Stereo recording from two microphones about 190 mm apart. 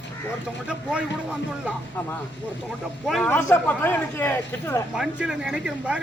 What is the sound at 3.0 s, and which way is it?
Speech, centre (ahead or behind).